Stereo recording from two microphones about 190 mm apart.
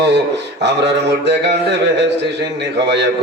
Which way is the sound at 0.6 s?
65° right (ahead or behind).